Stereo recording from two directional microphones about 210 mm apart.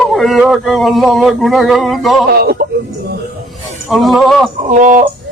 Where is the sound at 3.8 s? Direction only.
Centre (ahead or behind).